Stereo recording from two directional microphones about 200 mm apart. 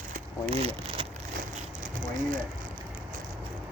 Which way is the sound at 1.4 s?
40° right (ahead or behind).